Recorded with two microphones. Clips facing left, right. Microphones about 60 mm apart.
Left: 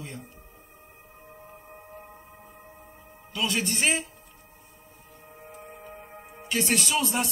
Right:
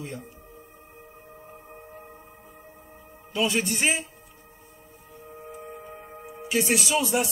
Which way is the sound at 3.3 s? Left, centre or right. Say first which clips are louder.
Right 3 dB; centre.